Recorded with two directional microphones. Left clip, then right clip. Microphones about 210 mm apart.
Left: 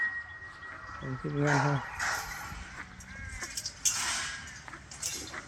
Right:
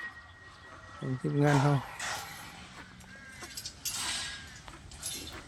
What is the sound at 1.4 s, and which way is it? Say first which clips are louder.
Speech: even; 35° right (ahead or behind).